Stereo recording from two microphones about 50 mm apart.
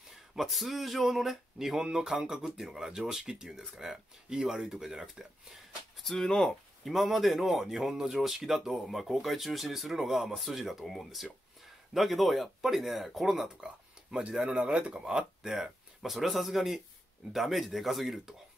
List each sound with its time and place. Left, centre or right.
0.4 s speech: centre
6.1 s speech: centre
6.8 s speech: centre
14.3 s speech: centre
15.4 s speech: centre